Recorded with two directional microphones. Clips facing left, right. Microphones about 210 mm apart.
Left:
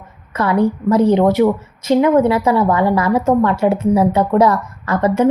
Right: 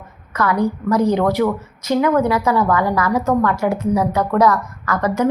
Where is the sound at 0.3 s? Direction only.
25° left (ahead or behind).